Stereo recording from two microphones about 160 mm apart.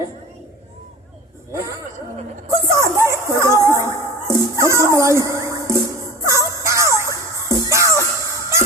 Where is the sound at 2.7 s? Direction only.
20° right (ahead or behind).